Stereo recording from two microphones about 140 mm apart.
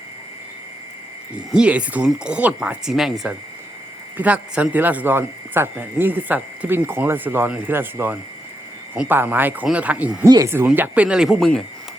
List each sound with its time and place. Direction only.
1.5 s speech: 5° right (ahead or behind)
10.2 s speech: 25° right (ahead or behind); by 11.6 s centre (ahead or behind)